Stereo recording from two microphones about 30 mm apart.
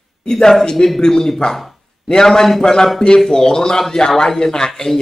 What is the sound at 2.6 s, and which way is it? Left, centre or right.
A man's voice, left.